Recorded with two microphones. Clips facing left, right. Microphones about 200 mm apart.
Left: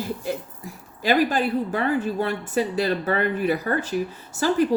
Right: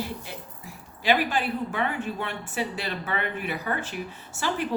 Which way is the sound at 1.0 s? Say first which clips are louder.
Left 4 dB; 40° left (ahead or behind).